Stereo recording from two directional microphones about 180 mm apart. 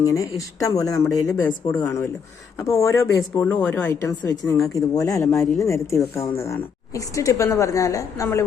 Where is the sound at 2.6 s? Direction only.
15° left (ahead or behind).